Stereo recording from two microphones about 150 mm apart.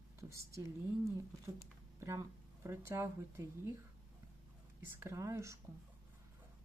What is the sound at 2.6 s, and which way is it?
A woman's voice, 20° right (ahead or behind).